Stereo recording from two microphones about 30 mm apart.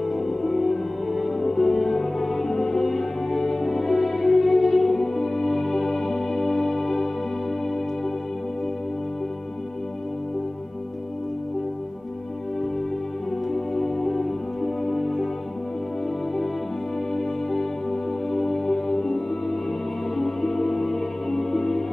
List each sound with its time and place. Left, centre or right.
0.0 s music: centre
13.5 s music: centre
17.1 s music: centre